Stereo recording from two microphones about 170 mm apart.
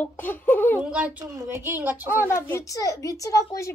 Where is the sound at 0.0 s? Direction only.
10° left (ahead or behind).